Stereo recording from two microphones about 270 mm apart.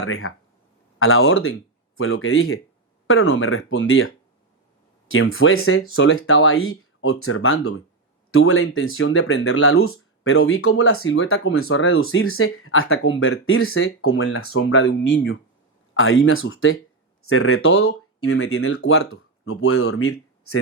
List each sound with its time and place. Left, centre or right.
0.0 s speech: left